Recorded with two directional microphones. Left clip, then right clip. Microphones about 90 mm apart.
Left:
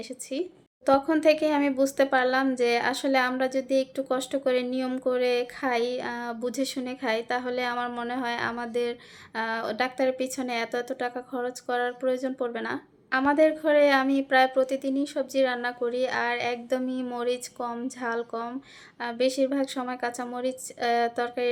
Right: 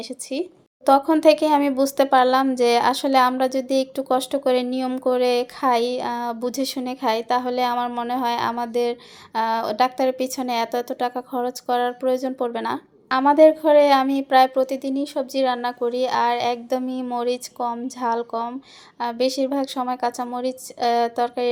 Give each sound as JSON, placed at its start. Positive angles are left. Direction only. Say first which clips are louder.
{"t": 0.3, "sound": "a woman's voice", "louder": "right 4 dB", "side_deg": -30}